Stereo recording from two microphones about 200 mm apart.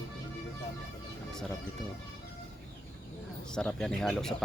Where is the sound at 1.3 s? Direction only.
5° left (ahead or behind).